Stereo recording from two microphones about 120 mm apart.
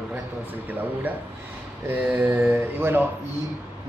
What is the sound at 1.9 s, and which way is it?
Speech, 15° right (ahead or behind).